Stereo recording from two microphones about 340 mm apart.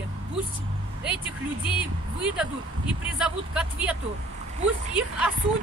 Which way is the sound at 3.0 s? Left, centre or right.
Centre.